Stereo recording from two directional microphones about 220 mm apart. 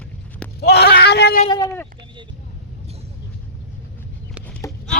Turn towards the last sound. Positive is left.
turn(degrees=5)  # may be behind; listen again after turning